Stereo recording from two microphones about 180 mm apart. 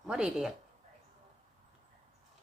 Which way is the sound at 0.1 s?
5° right (ahead or behind).